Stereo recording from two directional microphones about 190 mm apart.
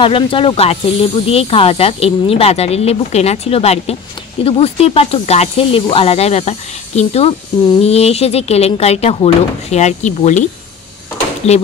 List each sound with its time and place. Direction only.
0.0 s speech: 30° left (ahead or behind)